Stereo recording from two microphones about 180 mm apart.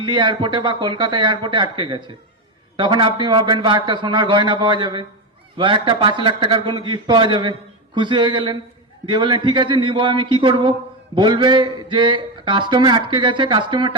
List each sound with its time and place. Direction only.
0.0 s a man's voice: 25° right (ahead or behind)